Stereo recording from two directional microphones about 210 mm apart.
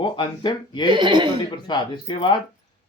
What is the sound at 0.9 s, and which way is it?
Speech, 20° right (ahead or behind).